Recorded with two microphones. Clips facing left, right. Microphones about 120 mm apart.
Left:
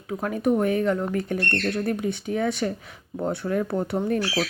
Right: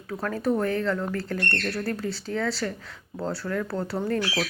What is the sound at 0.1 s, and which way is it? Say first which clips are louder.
A woman's voice: left 3 dB; 15° left (ahead or behind).